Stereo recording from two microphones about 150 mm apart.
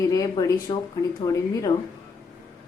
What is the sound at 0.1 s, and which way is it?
A woman's voice, 25° left (ahead or behind).